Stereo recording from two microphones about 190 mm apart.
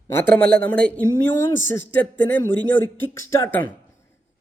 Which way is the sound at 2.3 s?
10° left (ahead or behind).